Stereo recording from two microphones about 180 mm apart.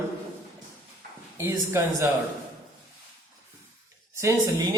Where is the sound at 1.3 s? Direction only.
15° right (ahead or behind).